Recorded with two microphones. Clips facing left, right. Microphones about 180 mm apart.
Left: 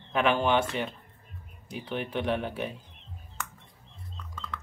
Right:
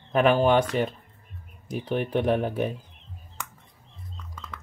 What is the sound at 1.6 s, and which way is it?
Speech, 40° right (ahead or behind).